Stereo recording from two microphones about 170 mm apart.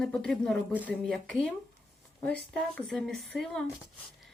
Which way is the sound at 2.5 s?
Centre (ahead or behind).